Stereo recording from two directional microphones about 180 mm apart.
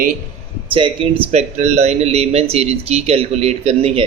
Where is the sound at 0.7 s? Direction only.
30° right (ahead or behind).